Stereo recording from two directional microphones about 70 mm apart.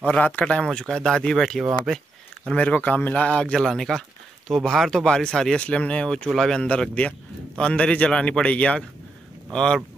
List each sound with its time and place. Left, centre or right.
0.0 s speech: centre
1.4 s speech: centre
2.5 s a man's voice: left
3.6 s speech: centre